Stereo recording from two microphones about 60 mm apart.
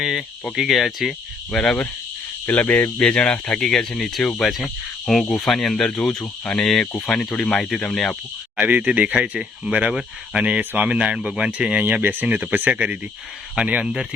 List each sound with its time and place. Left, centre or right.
0.0 s speech: centre
2.5 s speech: left
3.0 s speech: centre
3.5 s speech: centre
7.0 s speech: centre
8.6 s speech: right
12.7 s speech: centre